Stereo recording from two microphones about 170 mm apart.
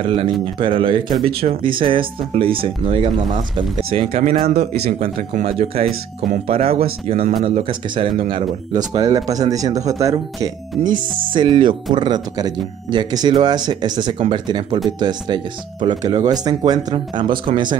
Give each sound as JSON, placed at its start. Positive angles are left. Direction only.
{"t": 0.0, "sound": "speech", "side_deg": -30}